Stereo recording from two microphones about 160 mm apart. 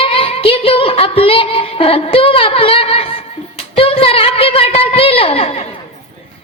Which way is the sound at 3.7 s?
35° left (ahead or behind).